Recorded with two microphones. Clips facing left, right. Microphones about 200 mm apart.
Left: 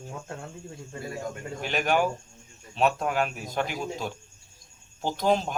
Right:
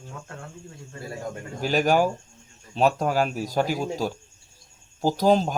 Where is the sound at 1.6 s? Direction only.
35° right (ahead or behind).